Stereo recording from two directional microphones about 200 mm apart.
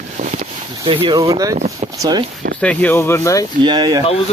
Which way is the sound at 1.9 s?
20° right (ahead or behind).